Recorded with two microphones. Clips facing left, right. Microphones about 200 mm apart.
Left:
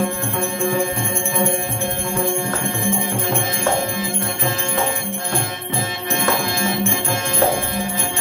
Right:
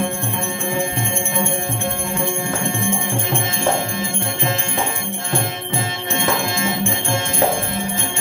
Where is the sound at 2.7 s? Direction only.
25° right (ahead or behind).